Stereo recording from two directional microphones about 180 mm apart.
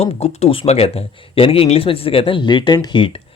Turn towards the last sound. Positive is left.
turn(degrees=25)  # may be behind; listen again after turning